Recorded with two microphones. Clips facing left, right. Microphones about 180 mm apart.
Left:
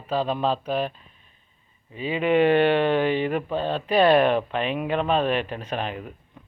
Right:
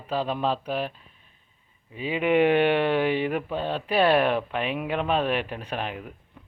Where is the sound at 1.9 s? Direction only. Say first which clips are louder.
Left 1 dB; 10° right (ahead or behind).